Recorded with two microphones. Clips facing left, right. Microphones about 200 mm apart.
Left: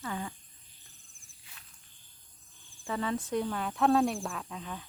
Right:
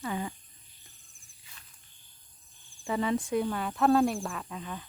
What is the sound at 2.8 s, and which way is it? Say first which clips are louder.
Speech: right 4 dB; 15° right (ahead or behind).